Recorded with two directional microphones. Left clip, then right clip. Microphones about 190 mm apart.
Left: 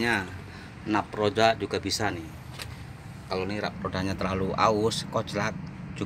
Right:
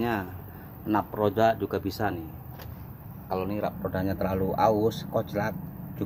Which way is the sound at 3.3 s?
5° right (ahead or behind).